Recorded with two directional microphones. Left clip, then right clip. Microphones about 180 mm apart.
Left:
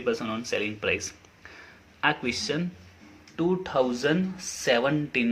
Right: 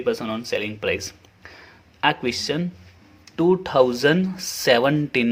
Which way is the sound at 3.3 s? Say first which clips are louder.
Right 8 dB; 50° right (ahead or behind).